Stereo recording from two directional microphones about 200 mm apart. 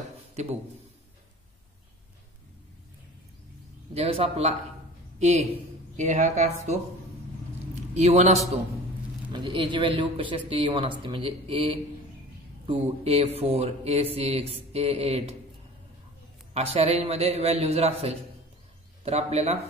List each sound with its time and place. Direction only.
0.3 s a sound: 35° right (ahead or behind)
3.9 s speech: 30° right (ahead or behind)
8.0 s speech: 30° right (ahead or behind)
16.5 s speech: 30° right (ahead or behind)